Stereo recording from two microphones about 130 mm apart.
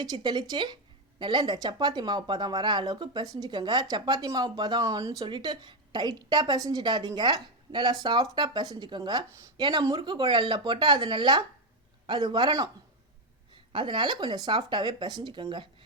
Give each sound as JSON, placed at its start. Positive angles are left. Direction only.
{"t": 0.0, "sound": "speech", "side_deg": -35}